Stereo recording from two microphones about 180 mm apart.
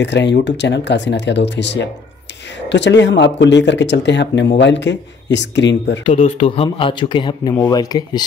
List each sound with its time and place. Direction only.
0.0 s speech: 80° left
6.0 s speech: 35° left (ahead or behind)